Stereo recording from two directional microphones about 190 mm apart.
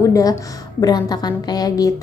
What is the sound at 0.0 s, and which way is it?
A woman's voice, 20° left (ahead or behind).